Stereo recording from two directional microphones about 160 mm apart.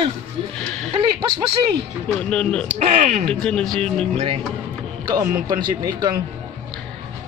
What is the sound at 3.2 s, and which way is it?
Speech, 5° left (ahead or behind).